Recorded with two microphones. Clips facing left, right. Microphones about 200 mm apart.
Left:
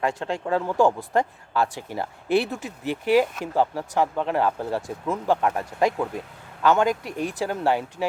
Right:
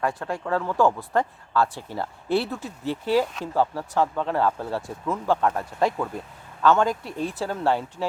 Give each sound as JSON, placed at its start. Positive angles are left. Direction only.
{"t": 0.0, "sound": "speech", "side_deg": 25}